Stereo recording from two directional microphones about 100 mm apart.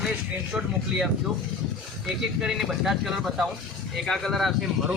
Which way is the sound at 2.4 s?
5° right (ahead or behind).